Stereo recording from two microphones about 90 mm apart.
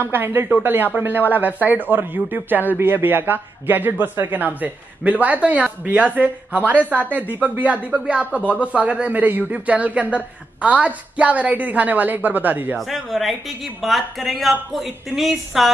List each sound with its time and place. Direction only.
0.0 s a man's voice: 25° right (ahead or behind)
12.7 s speech: centre (ahead or behind)